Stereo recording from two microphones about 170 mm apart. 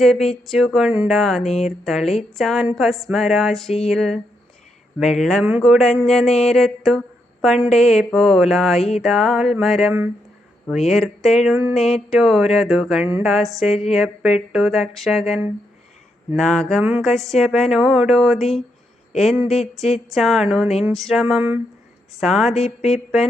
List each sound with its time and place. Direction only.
0.0 s speech: centre (ahead or behind)
16.3 s speech: 5° left (ahead or behind)
22.5 s a sound: 40° left (ahead or behind)